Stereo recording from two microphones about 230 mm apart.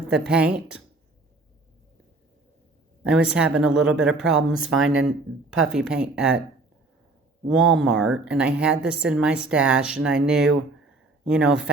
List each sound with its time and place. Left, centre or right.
0.1 s speech: centre
3.0 s speech: centre
4.7 s speech: right
5.5 s speech: centre
7.5 s speech: centre